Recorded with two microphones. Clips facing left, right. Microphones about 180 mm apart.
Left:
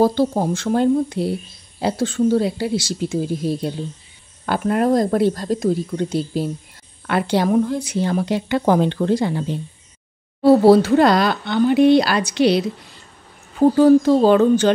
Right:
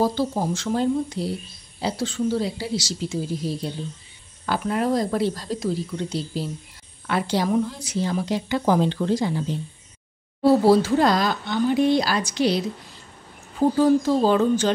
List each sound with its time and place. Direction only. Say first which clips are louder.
0.0 s a woman's voice: left 6 dB; 60° left (ahead or behind)
10.6 s a woman's voice: left 5 dB; 60° left (ahead or behind)
13.7 s a woman's voice: left 6 dB; 65° left (ahead or behind)